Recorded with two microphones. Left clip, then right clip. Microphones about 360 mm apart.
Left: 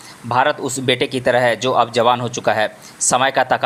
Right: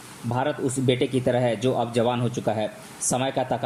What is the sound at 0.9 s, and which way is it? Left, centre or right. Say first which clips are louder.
Speech: left 7 dB; centre.